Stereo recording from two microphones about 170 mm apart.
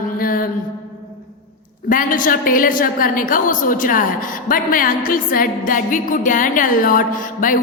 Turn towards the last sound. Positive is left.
turn(degrees=50)  # may be behind; listen again after turning